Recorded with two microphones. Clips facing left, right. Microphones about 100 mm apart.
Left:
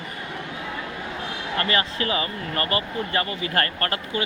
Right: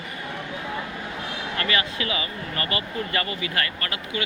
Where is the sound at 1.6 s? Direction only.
35° left (ahead or behind).